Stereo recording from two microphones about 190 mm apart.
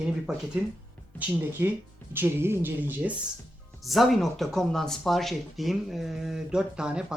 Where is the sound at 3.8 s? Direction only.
Centre (ahead or behind).